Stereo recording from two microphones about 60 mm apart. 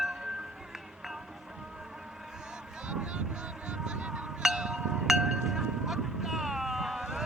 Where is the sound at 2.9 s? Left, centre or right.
Centre.